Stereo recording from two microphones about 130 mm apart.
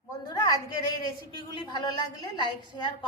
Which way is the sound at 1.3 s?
40° left (ahead or behind).